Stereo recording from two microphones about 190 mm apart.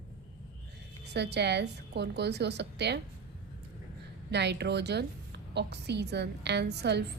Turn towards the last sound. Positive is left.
turn(degrees=-60)  # may be behind; listen again after turning